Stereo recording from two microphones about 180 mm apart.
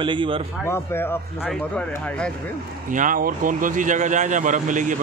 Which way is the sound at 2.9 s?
45° right (ahead or behind).